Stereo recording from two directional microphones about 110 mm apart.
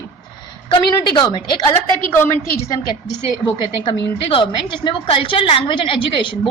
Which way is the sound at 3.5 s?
45° left (ahead or behind).